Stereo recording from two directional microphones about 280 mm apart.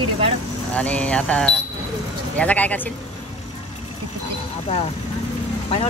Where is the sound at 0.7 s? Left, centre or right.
Centre.